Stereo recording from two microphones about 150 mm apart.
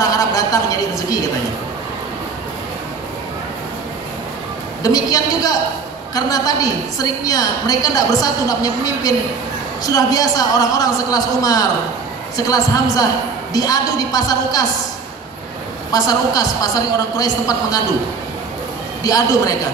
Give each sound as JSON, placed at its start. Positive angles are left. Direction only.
{"t": 0.0, "sound": "a sound", "side_deg": 25}
{"t": 4.8, "sound": "a woman's voice", "side_deg": 25}
{"t": 15.9, "sound": "a woman's voice", "side_deg": 25}
{"t": 19.0, "sound": "a woman's voice", "side_deg": 25}